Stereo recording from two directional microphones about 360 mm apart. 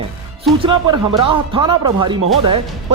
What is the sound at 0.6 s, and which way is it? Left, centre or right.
Speech, centre.